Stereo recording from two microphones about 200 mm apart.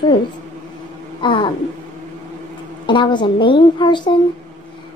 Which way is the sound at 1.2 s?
25° left (ahead or behind).